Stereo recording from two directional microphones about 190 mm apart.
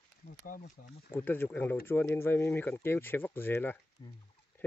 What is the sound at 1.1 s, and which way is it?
Speech, 10° left (ahead or behind).